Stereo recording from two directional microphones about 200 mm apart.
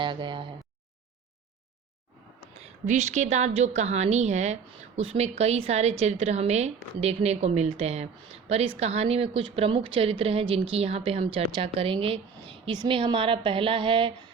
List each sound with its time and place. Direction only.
0.0 s speech: 25° right (ahead or behind)
2.8 s a woman's voice: 35° right (ahead or behind)